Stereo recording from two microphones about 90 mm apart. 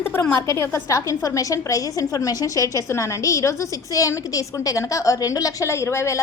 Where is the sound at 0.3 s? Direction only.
30° left (ahead or behind).